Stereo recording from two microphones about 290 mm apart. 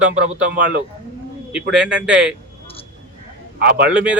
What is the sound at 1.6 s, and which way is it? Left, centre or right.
Speech, right.